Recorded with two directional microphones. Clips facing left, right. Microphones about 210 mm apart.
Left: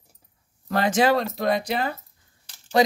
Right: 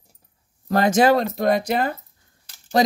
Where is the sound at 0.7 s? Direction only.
40° right (ahead or behind).